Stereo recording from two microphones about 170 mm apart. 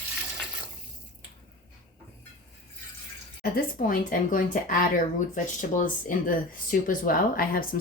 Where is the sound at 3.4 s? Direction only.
60° left (ahead or behind).